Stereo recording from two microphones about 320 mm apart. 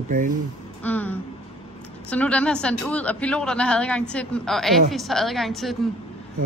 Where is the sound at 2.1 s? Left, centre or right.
Centre.